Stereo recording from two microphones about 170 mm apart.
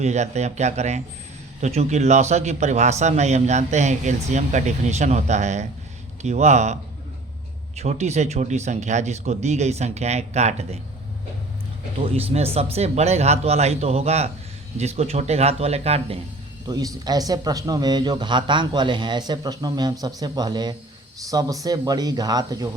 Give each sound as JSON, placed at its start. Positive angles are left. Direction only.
{"t": 0.0, "sound": "a man's voice", "side_deg": -40}
{"t": 7.8, "sound": "speech", "side_deg": -40}
{"t": 11.9, "sound": "speech", "side_deg": -35}
{"t": 16.6, "sound": "a man's voice", "side_deg": -20}